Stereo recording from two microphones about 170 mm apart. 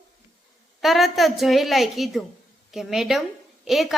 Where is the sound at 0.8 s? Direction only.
Centre (ahead or behind).